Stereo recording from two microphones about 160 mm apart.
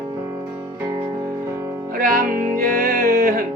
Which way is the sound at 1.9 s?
60° right (ahead or behind).